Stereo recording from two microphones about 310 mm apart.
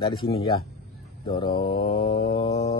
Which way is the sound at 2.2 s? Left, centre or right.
Centre.